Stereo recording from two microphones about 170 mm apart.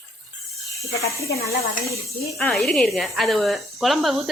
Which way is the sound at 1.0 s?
20° left (ahead or behind).